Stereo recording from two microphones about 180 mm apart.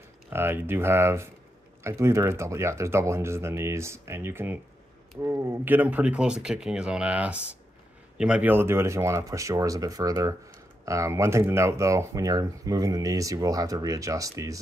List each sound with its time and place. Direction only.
0.3 s speech: 10° right (ahead or behind)